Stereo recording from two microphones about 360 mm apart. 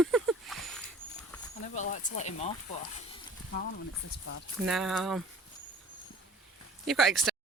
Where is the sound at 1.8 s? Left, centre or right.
Left.